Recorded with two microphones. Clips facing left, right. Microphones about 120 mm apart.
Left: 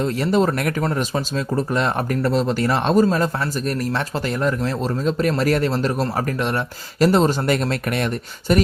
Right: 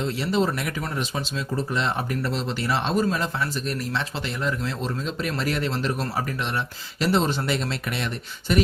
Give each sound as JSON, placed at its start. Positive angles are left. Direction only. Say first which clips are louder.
{"t": 0.0, "sound": "speech", "louder": "left 5 dB", "side_deg": 45}